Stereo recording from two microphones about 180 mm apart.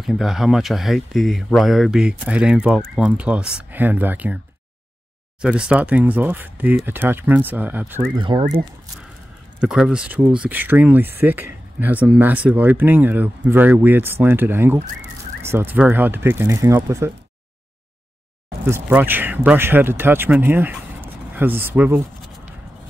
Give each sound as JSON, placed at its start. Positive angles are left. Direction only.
{"t": 0.0, "sound": "speech", "side_deg": 0}
{"t": 5.4, "sound": "speech", "side_deg": -5}
{"t": 8.1, "sound": "speech", "side_deg": -25}
{"t": 9.6, "sound": "speech", "side_deg": -5}
{"t": 18.7, "sound": "speech", "side_deg": -10}